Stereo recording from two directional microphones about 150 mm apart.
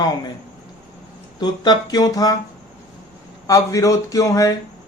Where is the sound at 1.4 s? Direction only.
30° left (ahead or behind).